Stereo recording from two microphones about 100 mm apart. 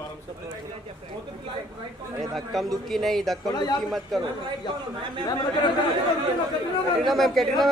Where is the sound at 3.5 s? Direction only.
40° left (ahead or behind).